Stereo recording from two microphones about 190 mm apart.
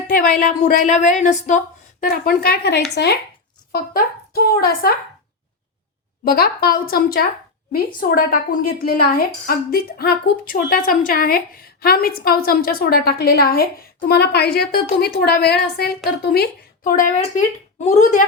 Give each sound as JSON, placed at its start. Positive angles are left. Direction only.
{"t": 0.1, "sound": "a woman's voice", "side_deg": 45}
{"t": 6.2, "sound": "a woman's voice", "side_deg": 50}